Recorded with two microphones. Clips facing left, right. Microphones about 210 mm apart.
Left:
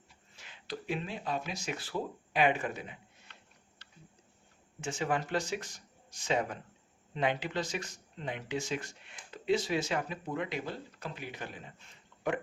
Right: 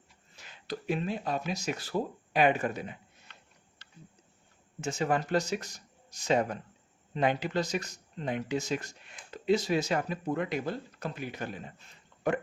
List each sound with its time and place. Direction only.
0.3 s speech: 40° right (ahead or behind)
4.8 s speech: 40° right (ahead or behind)